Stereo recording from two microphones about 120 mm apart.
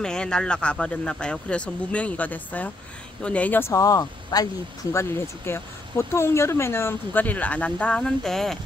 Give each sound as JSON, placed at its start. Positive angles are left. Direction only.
{"t": 0.0, "sound": "speech", "side_deg": 5}
{"t": 3.8, "sound": "speech", "side_deg": 30}
{"t": 4.9, "sound": "speech", "side_deg": 20}